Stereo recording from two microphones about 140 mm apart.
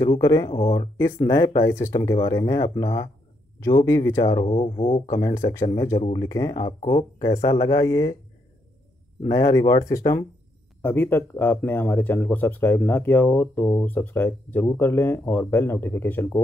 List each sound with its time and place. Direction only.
0.2 s speech: 20° left (ahead or behind)
0.5 s speech: 45° left (ahead or behind)
0.9 s speech: 15° left (ahead or behind)
4.5 s speech: 40° left (ahead or behind)
5.5 s speech: 20° left (ahead or behind)
9.3 s speech: 25° left (ahead or behind)
10.8 s speech: 15° left (ahead or behind)